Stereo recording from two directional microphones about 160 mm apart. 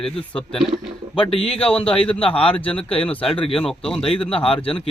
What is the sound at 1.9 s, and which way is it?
Speech, 10° left (ahead or behind).